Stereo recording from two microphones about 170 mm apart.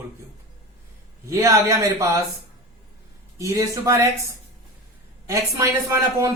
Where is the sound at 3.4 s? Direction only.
20° right (ahead or behind).